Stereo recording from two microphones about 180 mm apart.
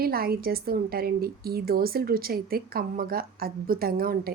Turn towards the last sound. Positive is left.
turn(degrees=-55)  # may be behind; listen again after turning